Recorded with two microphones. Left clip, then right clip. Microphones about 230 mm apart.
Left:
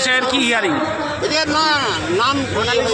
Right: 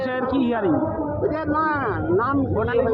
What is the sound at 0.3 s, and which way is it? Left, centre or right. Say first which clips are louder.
A man's voice: left 5 dB; centre.